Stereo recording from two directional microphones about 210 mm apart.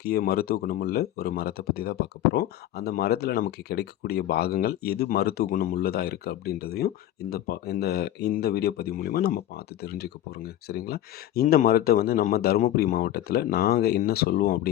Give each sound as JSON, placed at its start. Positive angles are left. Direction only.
{"t": 0.0, "sound": "speech", "side_deg": 50}